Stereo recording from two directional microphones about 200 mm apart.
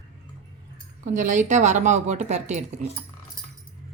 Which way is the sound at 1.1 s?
40° right (ahead or behind).